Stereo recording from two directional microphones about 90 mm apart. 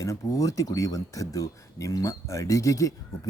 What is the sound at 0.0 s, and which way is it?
Speech, 35° left (ahead or behind).